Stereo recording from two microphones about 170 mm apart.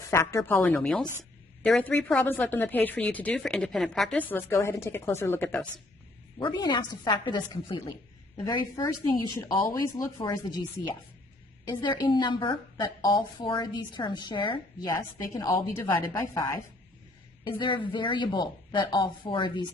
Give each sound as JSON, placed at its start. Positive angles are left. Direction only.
{"t": 0.1, "sound": "speech", "side_deg": 15}
{"t": 6.4, "sound": "a woman's voice", "side_deg": 25}
{"t": 17.4, "sound": "a woman's voice", "side_deg": 30}